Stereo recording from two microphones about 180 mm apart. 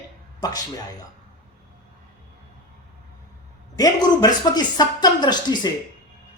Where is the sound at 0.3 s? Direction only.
20° left (ahead or behind).